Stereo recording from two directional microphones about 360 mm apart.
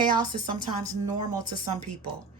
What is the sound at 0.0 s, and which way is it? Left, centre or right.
Speech, centre.